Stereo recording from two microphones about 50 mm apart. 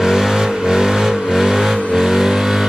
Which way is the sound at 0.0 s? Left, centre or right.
Centre.